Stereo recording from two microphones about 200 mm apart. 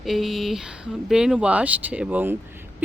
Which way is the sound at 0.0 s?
Centre (ahead or behind).